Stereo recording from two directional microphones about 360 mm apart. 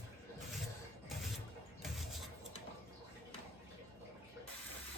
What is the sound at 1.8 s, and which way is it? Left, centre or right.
Vehicle, centre.